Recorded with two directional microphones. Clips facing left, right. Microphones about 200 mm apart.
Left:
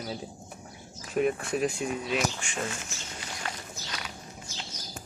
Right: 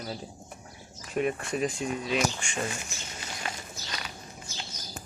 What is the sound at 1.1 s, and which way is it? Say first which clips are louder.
Speech: left 2 dB; centre (ahead or behind).